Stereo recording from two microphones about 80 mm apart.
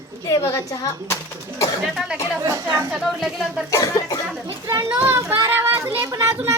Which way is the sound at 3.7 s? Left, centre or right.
Left.